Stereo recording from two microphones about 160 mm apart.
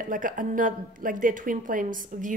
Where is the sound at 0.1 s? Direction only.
55° right (ahead or behind).